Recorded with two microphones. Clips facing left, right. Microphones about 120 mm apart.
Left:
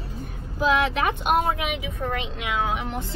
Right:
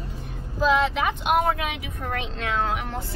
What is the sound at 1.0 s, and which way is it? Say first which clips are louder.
Speech: even; 45° left (ahead or behind).